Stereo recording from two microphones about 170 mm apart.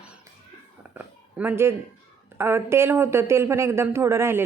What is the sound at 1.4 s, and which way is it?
Speech, 10° right (ahead or behind).